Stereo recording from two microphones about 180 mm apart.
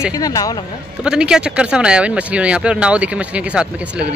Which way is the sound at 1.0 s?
5° right (ahead or behind).